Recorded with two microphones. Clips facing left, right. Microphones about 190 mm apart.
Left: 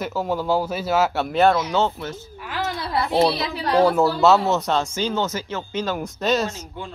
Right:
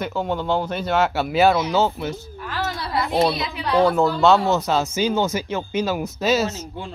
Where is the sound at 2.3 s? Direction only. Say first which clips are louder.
Even; 10° left (ahead or behind).